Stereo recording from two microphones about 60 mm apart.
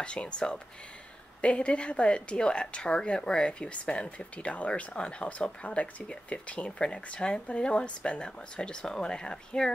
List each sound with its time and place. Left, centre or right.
0.0 s a woman's voice: centre